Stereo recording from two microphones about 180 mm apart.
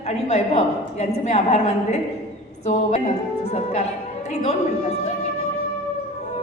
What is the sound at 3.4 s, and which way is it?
A woman's voice, 40° left (ahead or behind).